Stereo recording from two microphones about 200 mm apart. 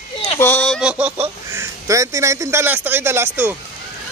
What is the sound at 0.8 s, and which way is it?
Speech, 5° right (ahead or behind).